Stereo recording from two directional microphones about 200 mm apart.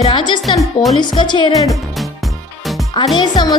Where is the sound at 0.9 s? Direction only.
25° left (ahead or behind).